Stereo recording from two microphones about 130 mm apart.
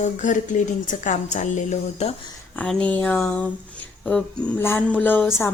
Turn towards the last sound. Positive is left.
turn(degrees=20)  # may be behind; listen again after turning